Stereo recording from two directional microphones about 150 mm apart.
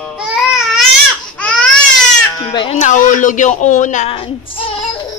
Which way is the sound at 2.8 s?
60° left (ahead or behind).